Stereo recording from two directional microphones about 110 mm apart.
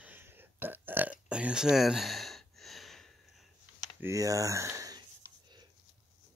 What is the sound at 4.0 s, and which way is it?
Speech, 30° right (ahead or behind).